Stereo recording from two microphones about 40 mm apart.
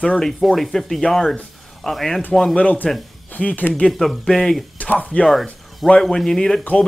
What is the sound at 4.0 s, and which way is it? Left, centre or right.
Speech, centre.